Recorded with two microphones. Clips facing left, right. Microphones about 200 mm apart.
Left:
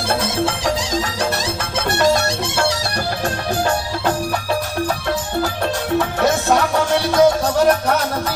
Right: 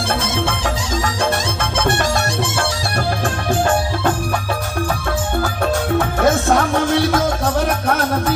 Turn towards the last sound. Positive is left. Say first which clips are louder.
# left 2 dB
turn(degrees=-50)  # may be behind; listen again after turning